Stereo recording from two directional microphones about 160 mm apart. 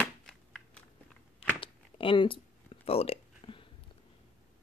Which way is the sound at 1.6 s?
35° left (ahead or behind).